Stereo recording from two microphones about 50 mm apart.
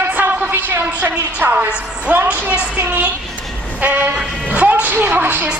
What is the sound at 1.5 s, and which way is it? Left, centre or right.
A woman's voice, right.